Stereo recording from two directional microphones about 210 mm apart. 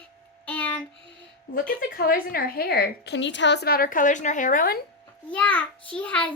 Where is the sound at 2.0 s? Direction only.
45° left (ahead or behind).